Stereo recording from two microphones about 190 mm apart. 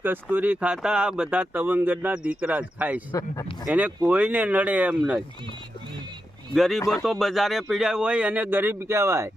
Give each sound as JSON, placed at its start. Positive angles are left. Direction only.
{"t": 0.0, "sound": "speech", "side_deg": -10}
{"t": 3.1, "sound": "speech", "side_deg": 15}
{"t": 3.7, "sound": "speech", "side_deg": -5}
{"t": 6.5, "sound": "speech", "side_deg": 0}